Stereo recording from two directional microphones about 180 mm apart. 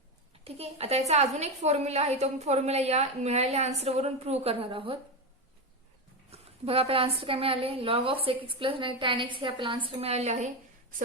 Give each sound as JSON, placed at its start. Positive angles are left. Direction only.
{"t": 0.4, "sound": "a woman's voice", "side_deg": -35}
{"t": 6.3, "sound": "a woman's voice", "side_deg": -35}